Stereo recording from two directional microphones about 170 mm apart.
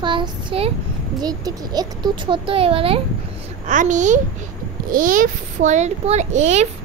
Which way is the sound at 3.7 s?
45° right (ahead or behind).